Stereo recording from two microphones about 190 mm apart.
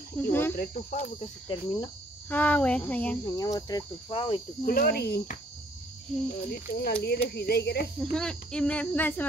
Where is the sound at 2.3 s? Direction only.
10° left (ahead or behind); by 4.4 s 25° left (ahead or behind).